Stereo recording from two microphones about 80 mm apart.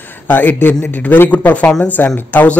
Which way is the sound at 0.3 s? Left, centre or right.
Left.